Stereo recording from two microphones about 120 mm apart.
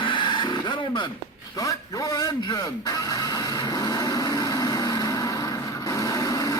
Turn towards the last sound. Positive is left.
turn(degrees=30)  # may be behind; listen again after turning